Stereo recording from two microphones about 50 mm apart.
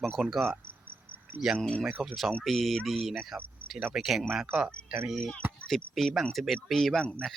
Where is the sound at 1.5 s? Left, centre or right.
Left.